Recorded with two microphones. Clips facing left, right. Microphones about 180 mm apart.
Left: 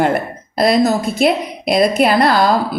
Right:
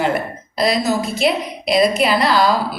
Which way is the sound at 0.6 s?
55° left (ahead or behind).